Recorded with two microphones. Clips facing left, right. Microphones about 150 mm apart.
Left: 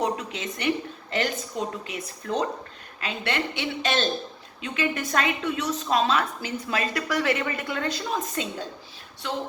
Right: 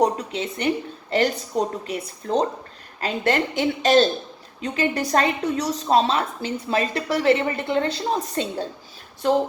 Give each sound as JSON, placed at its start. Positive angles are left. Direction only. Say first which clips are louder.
{"t": 0.0, "sound": "a woman's voice", "louder": "right 6 dB", "side_deg": -35}